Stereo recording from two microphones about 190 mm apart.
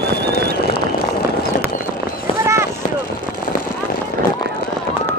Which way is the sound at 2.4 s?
15° right (ahead or behind).